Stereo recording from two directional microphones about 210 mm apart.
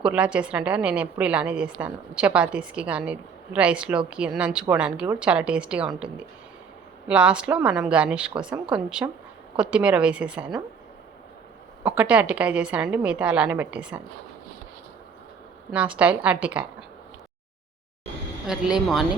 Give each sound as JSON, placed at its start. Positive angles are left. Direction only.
{"t": 0.0, "sound": "a woman's voice", "side_deg": -5}
{"t": 7.1, "sound": "a woman's voice", "side_deg": -5}
{"t": 11.8, "sound": "a woman's voice", "side_deg": -5}
{"t": 15.7, "sound": "a woman's voice", "side_deg": -5}
{"t": 18.4, "sound": "a woman's voice", "side_deg": -5}